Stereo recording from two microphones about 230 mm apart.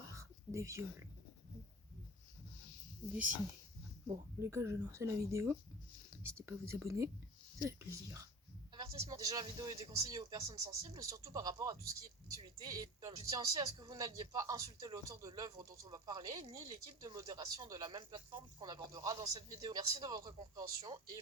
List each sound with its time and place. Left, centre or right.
0.1 s whispering: centre
4.1 s speech: centre
8.7 s a sound: centre
9.0 s speech: centre